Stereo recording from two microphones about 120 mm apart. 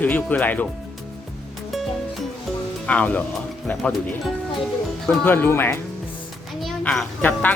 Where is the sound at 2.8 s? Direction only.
10° left (ahead or behind).